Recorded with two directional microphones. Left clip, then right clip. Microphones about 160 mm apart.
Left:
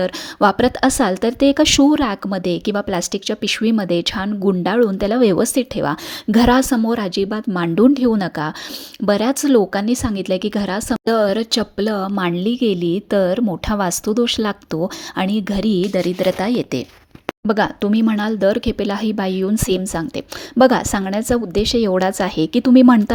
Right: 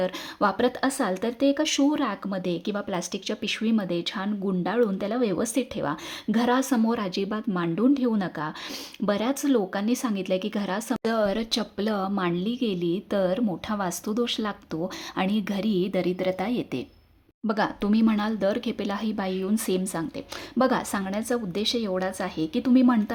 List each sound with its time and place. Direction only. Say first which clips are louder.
0.0 s a woman's voice: left 9 dB; 35° left (ahead or behind)